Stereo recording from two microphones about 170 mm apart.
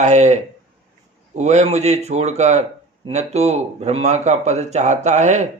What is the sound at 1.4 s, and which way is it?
Speech, 40° right (ahead or behind).